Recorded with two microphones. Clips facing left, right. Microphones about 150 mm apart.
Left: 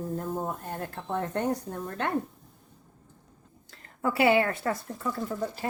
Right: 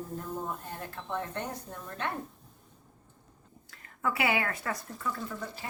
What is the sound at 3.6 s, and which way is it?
Speech, 35° left (ahead or behind).